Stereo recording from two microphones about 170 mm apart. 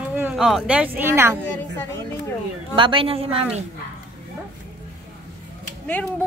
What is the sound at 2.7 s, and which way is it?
Speech, 30° right (ahead or behind).